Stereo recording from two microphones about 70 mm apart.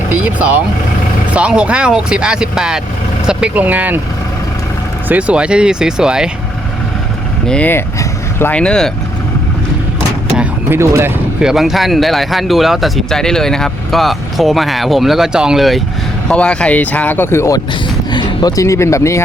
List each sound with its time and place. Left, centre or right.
0.1 s vehicle: right
1.3 s speech: centre
3.5 s speech: right
5.0 s speech: right
7.6 s speech: left
8.5 s speech: centre
10.7 s speech: right
11.3 s speech: centre
16.3 s speech: centre; by 17.5 s left
18.1 s a sound: left
18.5 s speech: left